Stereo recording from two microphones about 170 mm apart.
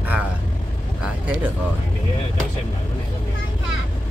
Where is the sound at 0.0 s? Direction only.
10° right (ahead or behind).